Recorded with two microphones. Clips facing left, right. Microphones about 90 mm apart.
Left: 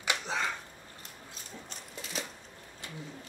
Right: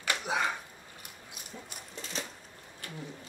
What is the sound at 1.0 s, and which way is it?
Mechanisms, 15° right (ahead or behind).